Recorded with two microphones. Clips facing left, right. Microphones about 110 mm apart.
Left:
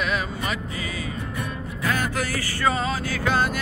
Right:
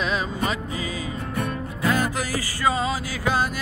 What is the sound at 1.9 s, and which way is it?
Music, 15° right (ahead or behind).